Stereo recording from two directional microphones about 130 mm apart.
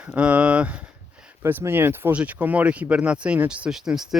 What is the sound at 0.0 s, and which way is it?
Speech, 10° right (ahead or behind).